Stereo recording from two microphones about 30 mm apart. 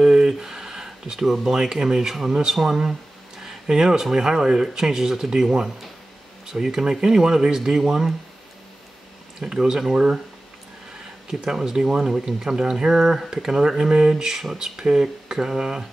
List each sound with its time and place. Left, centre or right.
0.1 s a sound: centre
1.4 s speech: centre
2.9 s a sound: centre
4.1 s speech: centre
9.4 s speech: centre
11.2 s speech: centre